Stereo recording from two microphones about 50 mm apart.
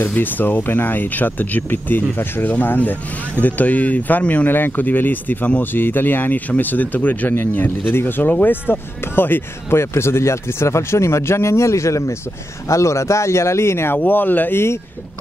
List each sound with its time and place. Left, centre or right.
0.1 s speech: left
4.5 s speech: left
13.9 s speech: left